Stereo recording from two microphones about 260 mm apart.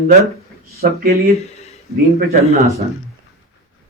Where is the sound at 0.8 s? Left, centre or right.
Right.